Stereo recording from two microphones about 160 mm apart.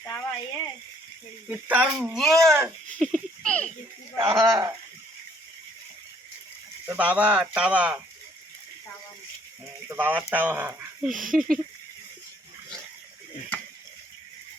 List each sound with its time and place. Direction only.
0.0 s speech: 15° left (ahead or behind)
1.5 s speech: 10° right (ahead or behind)
2.1 s speech: centre (ahead or behind)
3.0 s a sound: 5° left (ahead or behind)
4.2 s speech: 20° right (ahead or behind)
6.8 s speech: 10° right (ahead or behind)
9.9 s speech: 10° right (ahead or behind)
11.1 s speech: 55° right (ahead or behind)
11.3 s speech: 5° left (ahead or behind)